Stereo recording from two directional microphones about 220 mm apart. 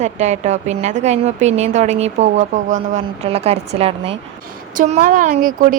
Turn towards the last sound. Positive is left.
turn(degrees=-40)  # may be behind; listen again after turning